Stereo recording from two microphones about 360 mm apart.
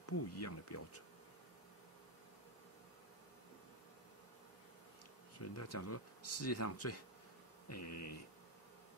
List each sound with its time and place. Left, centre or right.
0.2 s speech: left
5.4 s speech: left